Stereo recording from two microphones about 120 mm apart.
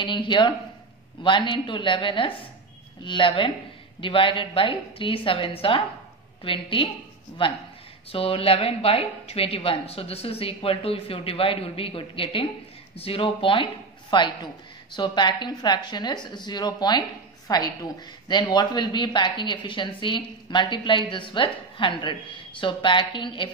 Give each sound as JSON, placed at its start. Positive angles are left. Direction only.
{"t": 0.0, "sound": "a man's voice", "side_deg": 40}